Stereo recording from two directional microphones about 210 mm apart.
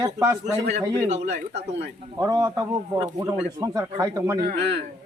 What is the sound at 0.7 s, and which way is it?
Speech, 35° right (ahead or behind).